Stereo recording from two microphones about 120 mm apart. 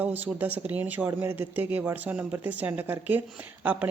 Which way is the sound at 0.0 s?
15° right (ahead or behind).